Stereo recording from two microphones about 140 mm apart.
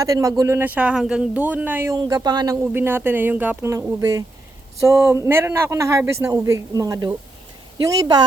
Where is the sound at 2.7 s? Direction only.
15° right (ahead or behind).